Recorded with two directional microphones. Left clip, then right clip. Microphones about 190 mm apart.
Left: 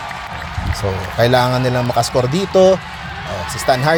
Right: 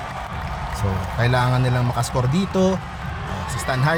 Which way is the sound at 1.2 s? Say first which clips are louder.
Left 8 dB; 25° left (ahead or behind).